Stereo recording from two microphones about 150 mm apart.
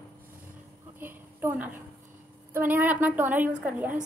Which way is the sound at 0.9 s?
15° right (ahead or behind).